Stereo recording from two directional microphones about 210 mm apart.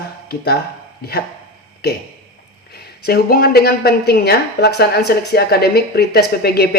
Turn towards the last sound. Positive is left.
turn(degrees=45)  # may be behind; listen again after turning